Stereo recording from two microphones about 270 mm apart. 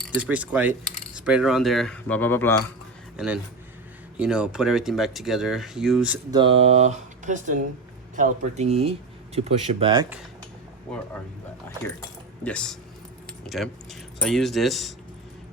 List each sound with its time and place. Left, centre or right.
0.0 s speech: centre
3.2 s speech: centre
6.3 s speech: centre
11.8 s speech: centre